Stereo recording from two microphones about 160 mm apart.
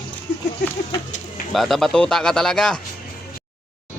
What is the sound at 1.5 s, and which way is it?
Speech, centre (ahead or behind).